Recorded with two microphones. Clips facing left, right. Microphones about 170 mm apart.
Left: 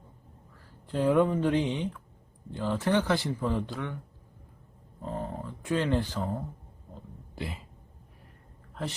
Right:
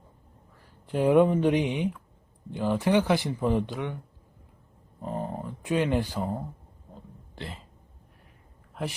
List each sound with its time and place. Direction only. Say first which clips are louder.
0.9 s speech: right 4 dB; 20° right (ahead or behind)
5.0 s speech: right 2 dB; 15° right (ahead or behind)
7.3 s speech: left 2 dB; 5° left (ahead or behind)
8.8 s speech: right 2 dB; 10° right (ahead or behind)